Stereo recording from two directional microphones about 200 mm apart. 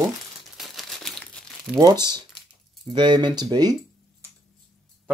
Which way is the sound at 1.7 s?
20° right (ahead or behind).